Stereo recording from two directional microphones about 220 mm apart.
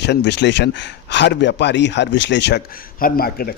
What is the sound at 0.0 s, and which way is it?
A man's voice, 50° left (ahead or behind).